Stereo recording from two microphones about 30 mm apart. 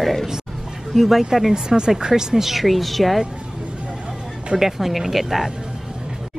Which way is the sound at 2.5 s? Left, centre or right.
Centre.